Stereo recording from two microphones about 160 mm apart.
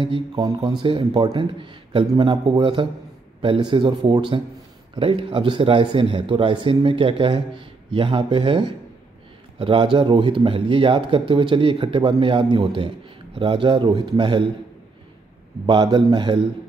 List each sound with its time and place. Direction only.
0.0 s speech: 30° right (ahead or behind)
0.5 s a man's voice: 20° right (ahead or behind)
15.6 s a man's voice: 30° right (ahead or behind)